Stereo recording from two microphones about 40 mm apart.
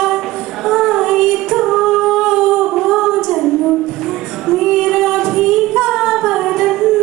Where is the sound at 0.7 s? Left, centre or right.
Centre.